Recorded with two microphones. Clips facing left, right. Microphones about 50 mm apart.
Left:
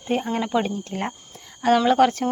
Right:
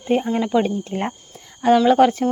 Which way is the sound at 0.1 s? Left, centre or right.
Centre.